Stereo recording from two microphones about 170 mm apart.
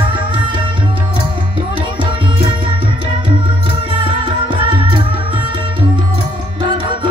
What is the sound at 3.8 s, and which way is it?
Music, 30° right (ahead or behind).